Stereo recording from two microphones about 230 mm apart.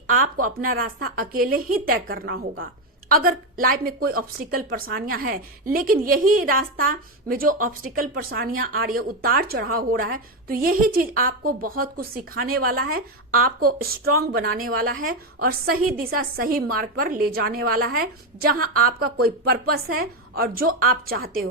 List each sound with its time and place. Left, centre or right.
0.6 s a woman's voice: right